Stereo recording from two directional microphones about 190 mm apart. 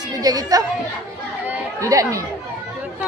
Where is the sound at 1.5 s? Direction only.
15° right (ahead or behind).